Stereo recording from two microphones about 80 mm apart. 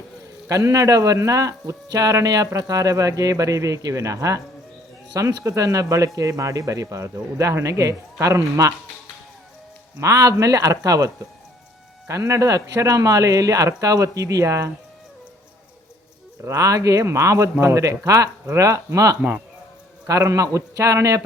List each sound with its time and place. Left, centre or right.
0.4 s speech: right
10.0 s speech: right
16.4 s speech: right